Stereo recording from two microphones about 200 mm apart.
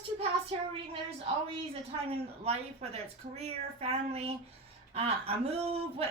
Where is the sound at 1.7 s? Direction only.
30° right (ahead or behind).